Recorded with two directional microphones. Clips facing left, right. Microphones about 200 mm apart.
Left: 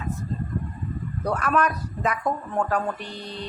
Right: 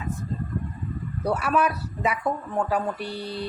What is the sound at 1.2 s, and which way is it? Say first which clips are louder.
A woman's voice: even; 10° right (ahead or behind).